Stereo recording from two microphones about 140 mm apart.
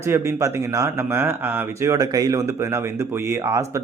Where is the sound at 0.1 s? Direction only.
20° right (ahead or behind).